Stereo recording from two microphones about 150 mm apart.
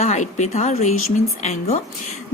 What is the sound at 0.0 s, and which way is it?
A woman's voice, 50° left (ahead or behind).